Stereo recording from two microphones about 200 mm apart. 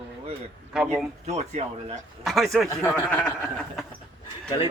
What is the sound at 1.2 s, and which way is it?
Speech, 35° right (ahead or behind).